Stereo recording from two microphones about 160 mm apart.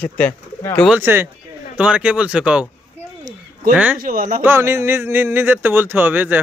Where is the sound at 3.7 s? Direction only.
10° right (ahead or behind).